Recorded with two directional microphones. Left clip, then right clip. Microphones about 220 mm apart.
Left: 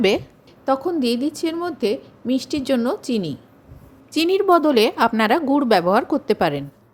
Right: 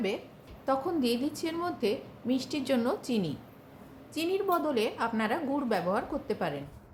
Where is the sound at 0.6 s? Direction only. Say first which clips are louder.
Left 9 dB; 35° left (ahead or behind).